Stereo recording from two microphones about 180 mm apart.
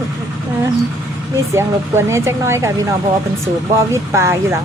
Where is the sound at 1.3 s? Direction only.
15° right (ahead or behind).